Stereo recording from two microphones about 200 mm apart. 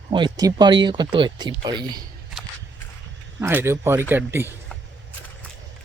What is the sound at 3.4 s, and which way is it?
Speech, 15° right (ahead or behind).